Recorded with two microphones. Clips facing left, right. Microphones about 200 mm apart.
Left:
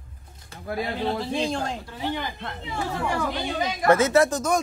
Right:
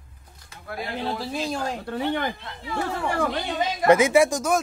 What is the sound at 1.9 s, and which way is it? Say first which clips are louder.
Speech: right 4 dB; 60° right (ahead or behind).